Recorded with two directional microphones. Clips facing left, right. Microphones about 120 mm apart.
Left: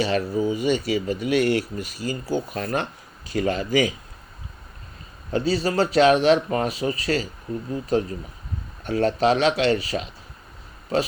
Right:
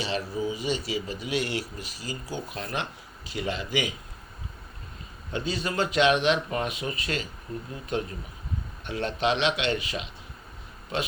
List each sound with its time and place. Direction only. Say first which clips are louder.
0.0 s speech: left 7 dB; 45° left (ahead or behind)
5.3 s speech: left 8 dB; 35° left (ahead or behind)